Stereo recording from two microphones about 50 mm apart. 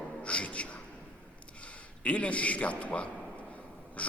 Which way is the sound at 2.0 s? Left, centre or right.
Left.